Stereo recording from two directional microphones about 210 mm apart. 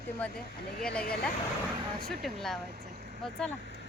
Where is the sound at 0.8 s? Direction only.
5° left (ahead or behind).